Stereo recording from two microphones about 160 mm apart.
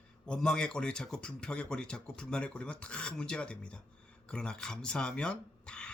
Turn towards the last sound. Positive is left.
turn(degrees=5)  # may be behind; listen again after turning